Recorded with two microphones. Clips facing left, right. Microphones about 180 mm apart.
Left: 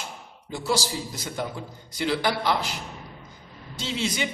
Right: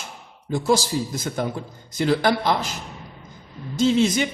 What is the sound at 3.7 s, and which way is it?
Speech, 45° right (ahead or behind).